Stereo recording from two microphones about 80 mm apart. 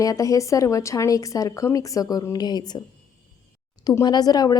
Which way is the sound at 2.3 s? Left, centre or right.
Left.